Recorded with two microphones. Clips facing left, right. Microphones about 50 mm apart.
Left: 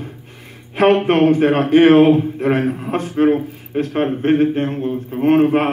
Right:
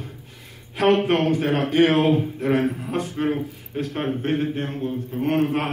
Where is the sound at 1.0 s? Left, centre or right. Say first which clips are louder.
Left 7 dB; left.